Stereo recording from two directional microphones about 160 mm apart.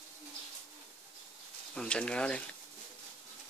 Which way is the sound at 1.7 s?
5° left (ahead or behind).